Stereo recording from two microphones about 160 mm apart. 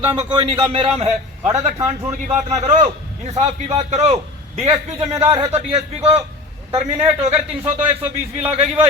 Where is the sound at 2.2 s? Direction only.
45° right (ahead or behind).